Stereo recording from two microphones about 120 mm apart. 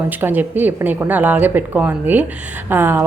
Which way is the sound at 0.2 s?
15° right (ahead or behind).